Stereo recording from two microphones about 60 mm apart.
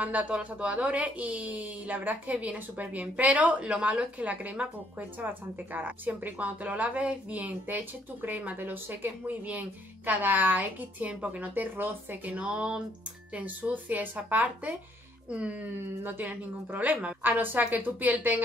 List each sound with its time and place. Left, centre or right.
0.0 s a woman's voice: right
12.4 s a woman's voice: centre
16.0 s a woman's voice: right